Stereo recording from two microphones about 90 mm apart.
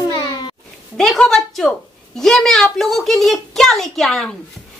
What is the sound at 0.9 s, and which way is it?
A woman's voice, 5° left (ahead or behind).